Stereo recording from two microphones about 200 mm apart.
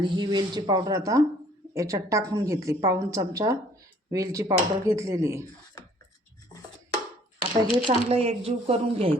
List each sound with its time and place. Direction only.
0.0 s a woman's voice: 20° right (ahead or behind)
7.6 s speech: 25° right (ahead or behind)